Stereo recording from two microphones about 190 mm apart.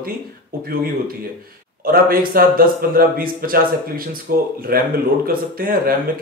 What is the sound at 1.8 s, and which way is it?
A man's voice, 50° right (ahead or behind).